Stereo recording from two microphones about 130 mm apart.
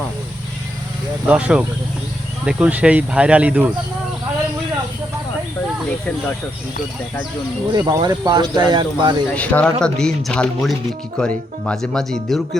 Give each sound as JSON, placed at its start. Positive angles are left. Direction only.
{"t": 1.3, "sound": "speech", "side_deg": -10}
{"t": 7.7, "sound": "speech", "side_deg": -30}
{"t": 9.3, "sound": "speech", "side_deg": 10}